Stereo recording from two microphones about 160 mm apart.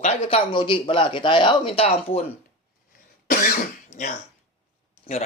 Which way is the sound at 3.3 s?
60° left (ahead or behind).